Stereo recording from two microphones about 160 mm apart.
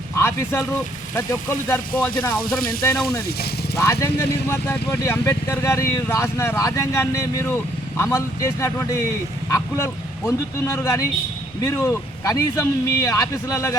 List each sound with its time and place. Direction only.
0.2 s speech: 15° left (ahead or behind)
2.9 s speech: centre (ahead or behind)
3.8 s speech: 15° left (ahead or behind)